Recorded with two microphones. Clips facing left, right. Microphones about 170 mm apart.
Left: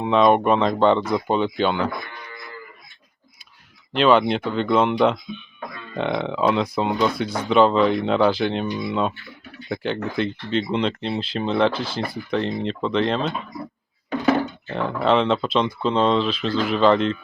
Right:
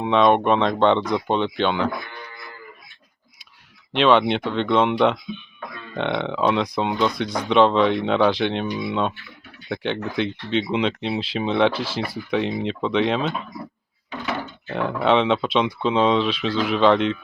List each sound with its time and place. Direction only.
0.0 s speech: centre (ahead or behind)
3.9 s speech: centre (ahead or behind)
14.7 s speech: centre (ahead or behind)